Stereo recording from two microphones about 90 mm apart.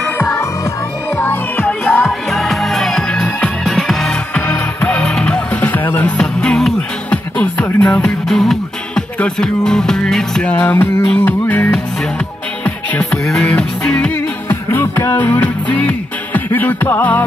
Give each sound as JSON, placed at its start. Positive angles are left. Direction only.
{"t": 0.2, "sound": "music", "side_deg": 30}
{"t": 2.0, "sound": "music", "side_deg": 5}
{"t": 4.3, "sound": "music", "side_deg": 20}
{"t": 10.5, "sound": "music", "side_deg": 20}
{"t": 14.5, "sound": "music", "side_deg": 25}